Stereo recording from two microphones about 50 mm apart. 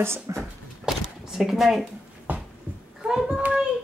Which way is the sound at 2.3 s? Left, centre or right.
Right.